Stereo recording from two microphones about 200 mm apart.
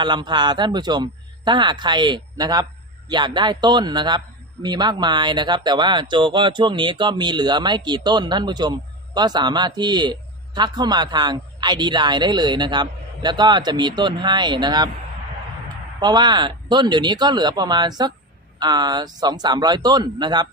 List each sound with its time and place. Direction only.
0.0 s speech: 20° right (ahead or behind)
16.0 s speech: 20° right (ahead or behind)